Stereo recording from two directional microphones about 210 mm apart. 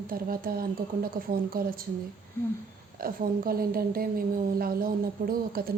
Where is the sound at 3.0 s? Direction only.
45° right (ahead or behind).